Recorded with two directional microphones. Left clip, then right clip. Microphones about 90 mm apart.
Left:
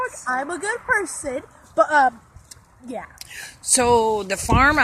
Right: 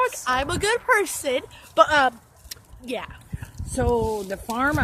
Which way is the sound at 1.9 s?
90° right.